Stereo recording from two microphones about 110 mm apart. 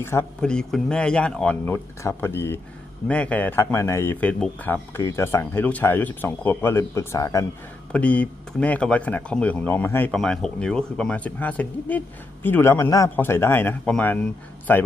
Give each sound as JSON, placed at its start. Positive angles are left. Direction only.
{"t": 0.0, "sound": "a man's voice", "side_deg": 20}
{"t": 0.4, "sound": "speech", "side_deg": 5}
{"t": 1.7, "sound": "a man's voice", "side_deg": 20}
{"t": 7.9, "sound": "speech", "side_deg": 10}
{"t": 10.1, "sound": "a man's voice", "side_deg": 5}